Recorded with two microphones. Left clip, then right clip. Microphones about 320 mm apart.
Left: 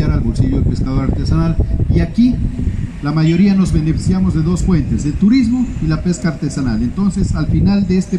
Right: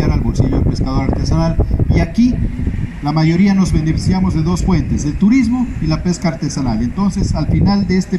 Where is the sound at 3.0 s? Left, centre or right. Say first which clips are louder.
Even; centre.